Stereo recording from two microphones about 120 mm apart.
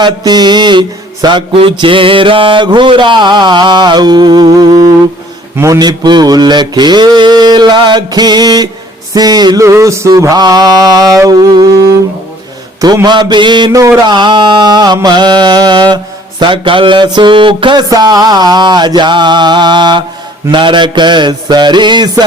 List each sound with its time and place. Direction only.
0.0 s mantra: 35° right (ahead or behind)
5.5 s a man's voice: 20° right (ahead or behind)
5.8 s mantra: 35° right (ahead or behind)
12.8 s mantra: 30° right (ahead or behind)
16.4 s music: 45° right (ahead or behind)
17.8 s mantra: 30° right (ahead or behind)